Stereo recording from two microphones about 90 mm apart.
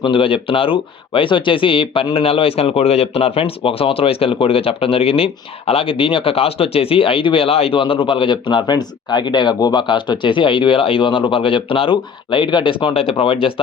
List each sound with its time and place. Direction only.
0.0 s speech: 75° left (ahead or behind)
2.1 s speech: 90° left
13.1 s speech: 75° left (ahead or behind)